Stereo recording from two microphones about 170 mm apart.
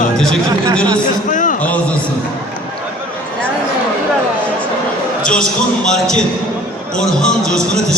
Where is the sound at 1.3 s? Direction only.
50° left (ahead or behind).